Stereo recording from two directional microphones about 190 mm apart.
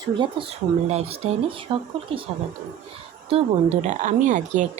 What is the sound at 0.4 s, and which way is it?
A woman's voice, 25° right (ahead or behind).